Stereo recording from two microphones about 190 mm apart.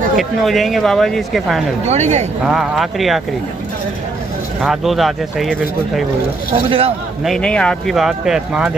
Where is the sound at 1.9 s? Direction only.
35° right (ahead or behind).